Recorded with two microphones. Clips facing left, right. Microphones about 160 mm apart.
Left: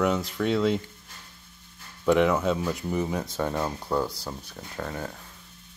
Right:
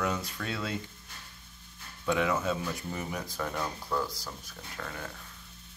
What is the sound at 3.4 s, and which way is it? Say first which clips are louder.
Speech: left 5 dB; 30° left (ahead or behind).